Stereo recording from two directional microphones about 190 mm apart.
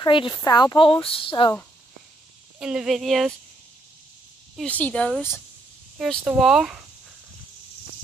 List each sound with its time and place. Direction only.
0.0 s speech: 25° left (ahead or behind)
2.6 s speech: 5° right (ahead or behind)
4.6 s speech: 10° left (ahead or behind)
5.9 s speech: 5° right (ahead or behind)